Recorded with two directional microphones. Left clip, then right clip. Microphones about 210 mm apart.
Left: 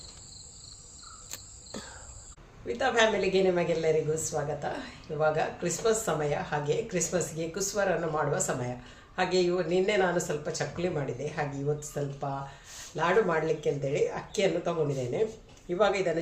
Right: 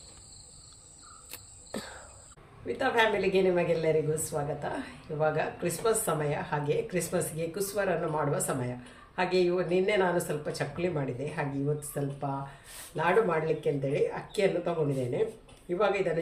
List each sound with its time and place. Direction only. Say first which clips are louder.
1.7 s cricket: right 3 dB; 20° right (ahead or behind)
2.6 s a woman's voice: left 1 dB; centre (ahead or behind)
13.0 s a woman's voice: even; centre (ahead or behind)
15.7 s a woman's voice: left 1 dB; centre (ahead or behind)